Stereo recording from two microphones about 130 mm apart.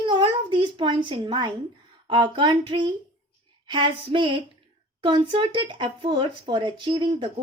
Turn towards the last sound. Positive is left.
turn(degrees=-40)  # may be behind; listen again after turning